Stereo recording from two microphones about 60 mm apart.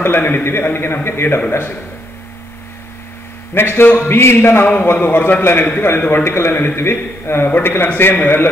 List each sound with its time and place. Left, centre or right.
0.0 s a man's voice: left
3.5 s a man's voice: left